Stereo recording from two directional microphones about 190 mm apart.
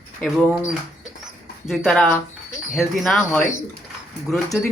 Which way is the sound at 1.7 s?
Centre (ahead or behind).